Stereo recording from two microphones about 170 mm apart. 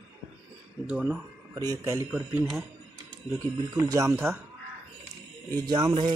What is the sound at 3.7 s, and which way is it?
Speech, 20° right (ahead or behind).